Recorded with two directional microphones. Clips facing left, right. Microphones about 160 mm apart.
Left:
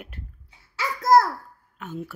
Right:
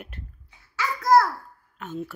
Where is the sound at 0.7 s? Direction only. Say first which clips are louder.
Left 1 dB; 40° left (ahead or behind).